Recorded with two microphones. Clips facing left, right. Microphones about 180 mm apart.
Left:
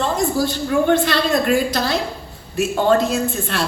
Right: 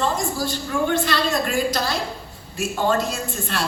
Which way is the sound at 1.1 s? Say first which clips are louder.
Left 5 dB; 55° left (ahead or behind).